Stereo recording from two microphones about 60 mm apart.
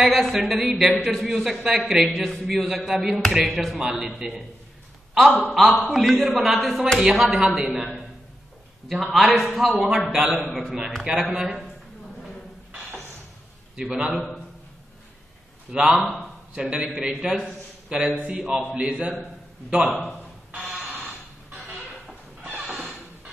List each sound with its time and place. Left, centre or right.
0.0 s a man's voice: centre
13.7 s a man's voice: centre
14.1 s a man's voice: centre
15.7 s a man's voice: centre
16.0 s a man's voice: centre
16.5 s a man's voice: centre
20.5 s telephone: centre